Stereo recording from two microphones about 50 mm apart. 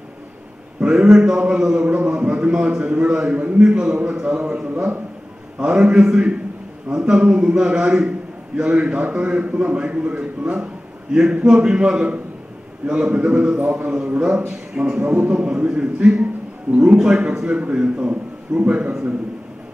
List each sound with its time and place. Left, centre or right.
0.7 s a man's voice: right
5.6 s a man's voice: centre
15.0 s a man's voice: right